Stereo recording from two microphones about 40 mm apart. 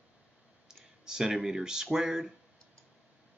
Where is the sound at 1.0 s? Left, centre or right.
Centre.